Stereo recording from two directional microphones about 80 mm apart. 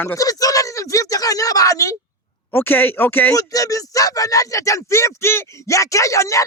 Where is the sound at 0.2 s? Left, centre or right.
Left.